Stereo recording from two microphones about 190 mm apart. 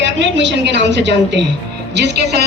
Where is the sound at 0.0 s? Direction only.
70° right (ahead or behind).